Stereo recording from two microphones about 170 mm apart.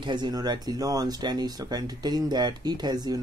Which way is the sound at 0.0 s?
25° right (ahead or behind).